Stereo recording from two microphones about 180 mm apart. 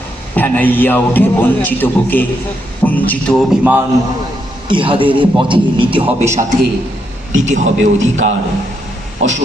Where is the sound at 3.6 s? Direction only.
10° right (ahead or behind).